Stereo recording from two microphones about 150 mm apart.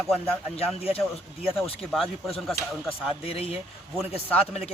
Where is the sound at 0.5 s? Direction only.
40° left (ahead or behind).